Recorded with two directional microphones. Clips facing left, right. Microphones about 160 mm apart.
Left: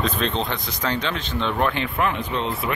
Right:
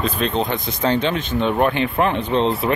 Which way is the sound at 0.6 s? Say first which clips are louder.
Right 6 dB; 25° right (ahead or behind).